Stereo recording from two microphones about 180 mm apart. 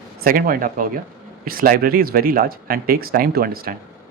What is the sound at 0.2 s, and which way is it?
Speech, 55° right (ahead or behind).